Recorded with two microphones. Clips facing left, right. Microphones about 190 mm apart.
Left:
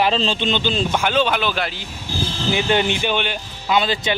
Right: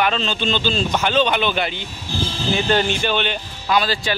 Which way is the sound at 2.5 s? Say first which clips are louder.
Even; 15° left (ahead or behind).